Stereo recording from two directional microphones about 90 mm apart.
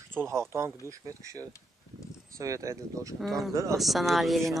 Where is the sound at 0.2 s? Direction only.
30° right (ahead or behind).